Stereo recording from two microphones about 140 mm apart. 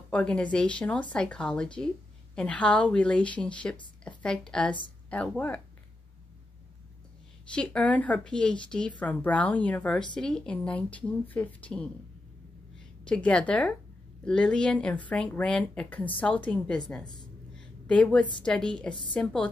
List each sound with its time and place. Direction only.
0.1 s a woman's voice: 10° left (ahead or behind)
7.4 s speech: 5° left (ahead or behind)
13.0 s speech: 5° left (ahead or behind)
17.0 s speech: 30° left (ahead or behind)
17.8 s speech: 10° left (ahead or behind)